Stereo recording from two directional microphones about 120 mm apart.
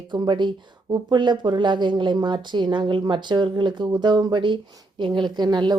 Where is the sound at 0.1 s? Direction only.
40° right (ahead or behind).